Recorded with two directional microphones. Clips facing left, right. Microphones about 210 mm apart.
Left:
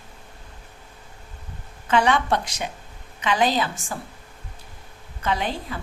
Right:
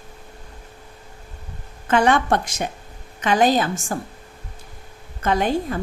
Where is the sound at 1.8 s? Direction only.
50° right (ahead or behind).